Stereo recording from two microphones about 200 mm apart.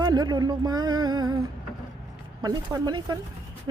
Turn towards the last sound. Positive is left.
turn(degrees=-20)  # may be behind; listen again after turning